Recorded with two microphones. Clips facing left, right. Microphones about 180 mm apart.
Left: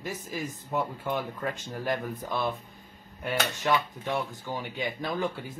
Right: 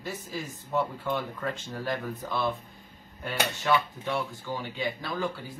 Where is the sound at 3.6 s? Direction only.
15° left (ahead or behind).